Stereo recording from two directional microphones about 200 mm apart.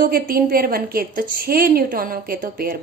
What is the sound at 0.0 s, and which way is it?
A woman's voice, 45° right (ahead or behind).